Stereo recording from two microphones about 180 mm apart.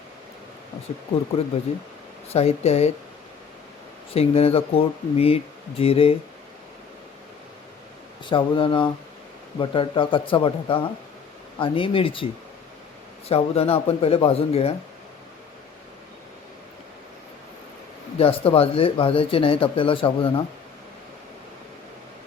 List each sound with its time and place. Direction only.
1.7 s speech: 35° left (ahead or behind)
4.1 s speech: 35° left (ahead or behind)
8.2 s speech: 25° left (ahead or behind)
18.2 s speech: 30° left (ahead or behind)